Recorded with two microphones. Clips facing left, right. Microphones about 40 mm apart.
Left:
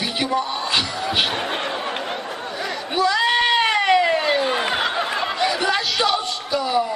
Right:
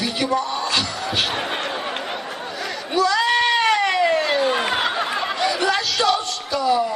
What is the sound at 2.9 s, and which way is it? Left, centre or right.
Bleat, left.